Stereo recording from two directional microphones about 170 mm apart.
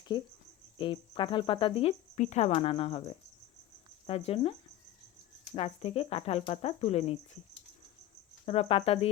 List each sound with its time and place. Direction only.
0.8 s cricket: 30° left (ahead or behind)
4.0 s cricket: 35° left (ahead or behind)
5.5 s cricket: 35° left (ahead or behind)
8.4 s cricket: 35° left (ahead or behind)